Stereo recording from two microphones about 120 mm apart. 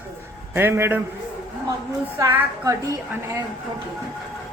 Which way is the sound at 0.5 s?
20° right (ahead or behind).